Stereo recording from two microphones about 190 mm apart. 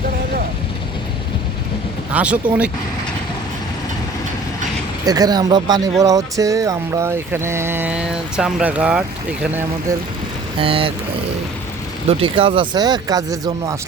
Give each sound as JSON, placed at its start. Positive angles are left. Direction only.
{"t": 2.1, "sound": "speech", "side_deg": -5}
{"t": 5.0, "sound": "speech", "side_deg": -20}
{"t": 10.6, "sound": "speech", "side_deg": -30}
{"t": 12.2, "sound": "speech", "side_deg": -30}